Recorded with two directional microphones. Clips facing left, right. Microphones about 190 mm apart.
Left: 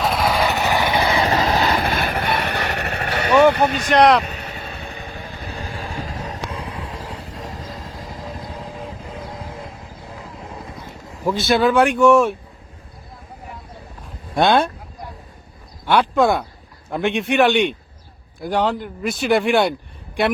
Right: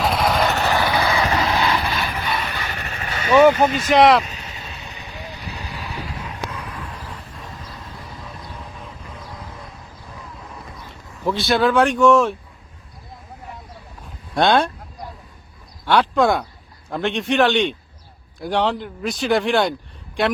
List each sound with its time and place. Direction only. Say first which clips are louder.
0.0 s vehicle: even; centre (ahead or behind)
0.5 s vehicle: even; 10° left (ahead or behind)
0.9 s vehicle: left 1 dB; 25° left (ahead or behind); by 3.6 s 70° left (ahead or behind)
3.8 s a man's voice: even; centre (ahead or behind)
4.2 s vehicle: left 2 dB; 60° left (ahead or behind); by 11.2 s 30° left (ahead or behind)
11.4 s speech: left 1 dB; 5° left (ahead or behind)
14.3 s a man's voice: left 1 dB; 5° left (ahead or behind)
15.9 s a man's voice: left 1 dB; 5° left (ahead or behind)